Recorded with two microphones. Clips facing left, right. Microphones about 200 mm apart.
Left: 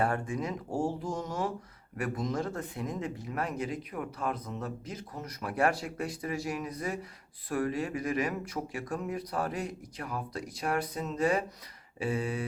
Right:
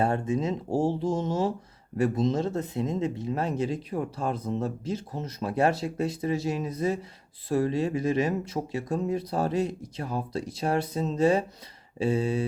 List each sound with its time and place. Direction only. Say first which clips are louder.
0.0 s speech: right 5 dB; 25° right (ahead or behind)